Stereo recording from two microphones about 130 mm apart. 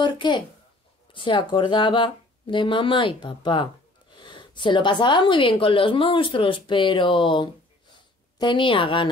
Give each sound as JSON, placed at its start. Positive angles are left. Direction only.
{"t": 0.0, "sound": "speech", "side_deg": 35}